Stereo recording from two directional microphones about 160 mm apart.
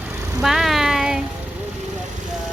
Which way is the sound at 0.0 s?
15° right (ahead or behind).